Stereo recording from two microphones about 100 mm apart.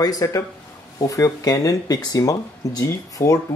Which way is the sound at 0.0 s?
40° left (ahead or behind).